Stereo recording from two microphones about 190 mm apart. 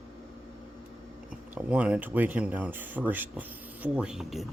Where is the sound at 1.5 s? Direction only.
5° right (ahead or behind).